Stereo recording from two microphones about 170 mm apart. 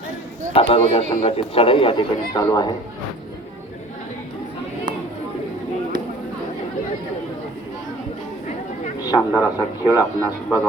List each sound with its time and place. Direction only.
0.5 s speech: 35° left (ahead or behind)
9.0 s a man's voice: 20° left (ahead or behind)